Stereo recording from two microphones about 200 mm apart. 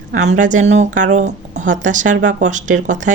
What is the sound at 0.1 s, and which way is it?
A woman's voice, 40° right (ahead or behind).